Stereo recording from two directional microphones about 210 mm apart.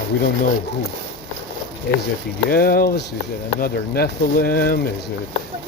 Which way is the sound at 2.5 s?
45° left (ahead or behind).